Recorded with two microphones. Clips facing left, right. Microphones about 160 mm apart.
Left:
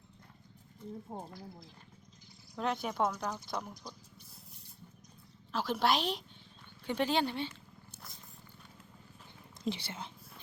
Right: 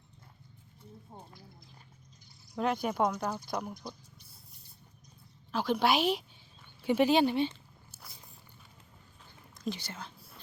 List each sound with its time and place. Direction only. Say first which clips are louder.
1.1 s speech: left 6 dB; 70° left (ahead or behind)
2.6 s a woman's voice: right 3 dB; centre (ahead or behind)
5.5 s a woman's voice: right 3 dB; centre (ahead or behind)
6.8 s a sound: right 6 dB; 10° right (ahead or behind)
9.6 s speech: even; 25° left (ahead or behind)